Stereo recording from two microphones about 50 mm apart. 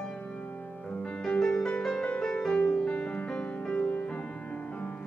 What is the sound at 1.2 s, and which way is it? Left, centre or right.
Music, centre.